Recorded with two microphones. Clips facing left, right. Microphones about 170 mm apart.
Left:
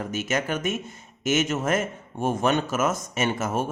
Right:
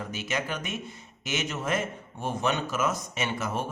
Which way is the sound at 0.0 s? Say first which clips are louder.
Left 5 dB; 45° left (ahead or behind).